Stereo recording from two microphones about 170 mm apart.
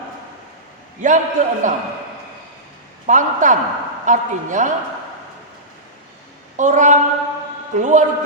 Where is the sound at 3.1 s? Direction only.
45° right (ahead or behind).